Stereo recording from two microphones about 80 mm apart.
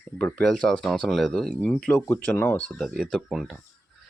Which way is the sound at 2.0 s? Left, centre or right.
Left.